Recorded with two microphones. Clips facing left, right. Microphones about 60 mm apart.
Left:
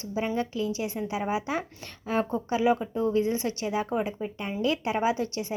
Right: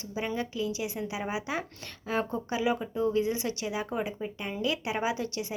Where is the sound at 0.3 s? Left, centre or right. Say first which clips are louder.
Left 3 dB; left.